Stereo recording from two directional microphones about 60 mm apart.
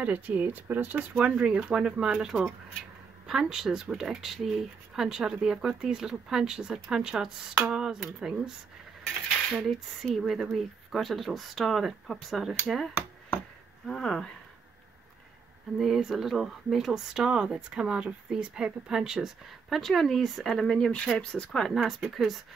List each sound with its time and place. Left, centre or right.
0.0 s speech: right; by 8.4 s centre
9.5 s speech: centre
15.8 s speech: centre
19.8 s speech: centre
21.5 s speech: centre